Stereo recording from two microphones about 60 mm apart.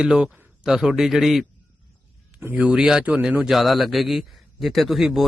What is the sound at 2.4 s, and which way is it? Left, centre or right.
Speech, right.